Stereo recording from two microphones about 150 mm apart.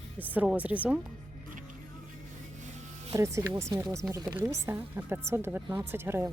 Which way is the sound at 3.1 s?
20° right (ahead or behind).